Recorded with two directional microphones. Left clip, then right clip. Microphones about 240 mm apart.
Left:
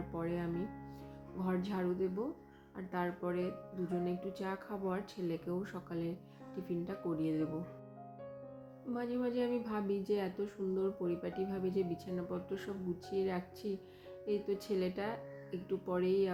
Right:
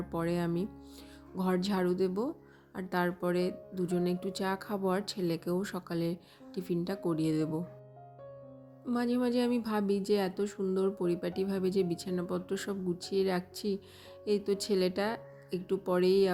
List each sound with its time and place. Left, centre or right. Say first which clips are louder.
0.1 s speech: right 7 dB; right
8.9 s speech: right 6 dB; right